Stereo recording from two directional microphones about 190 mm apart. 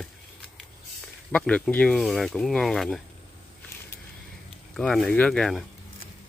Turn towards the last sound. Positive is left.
turn(degrees=0)  # may be behind; listen again after turning